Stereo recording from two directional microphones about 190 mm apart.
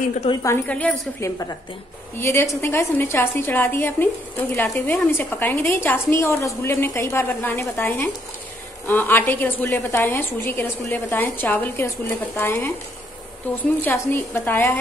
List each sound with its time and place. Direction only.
0.4 s a woman's voice: 10° left (ahead or behind)